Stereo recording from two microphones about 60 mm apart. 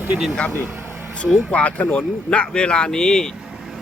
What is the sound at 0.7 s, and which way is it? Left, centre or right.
Vehicle, right.